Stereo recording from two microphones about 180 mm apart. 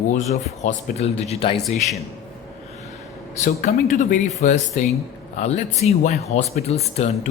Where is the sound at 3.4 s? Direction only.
45° left (ahead or behind).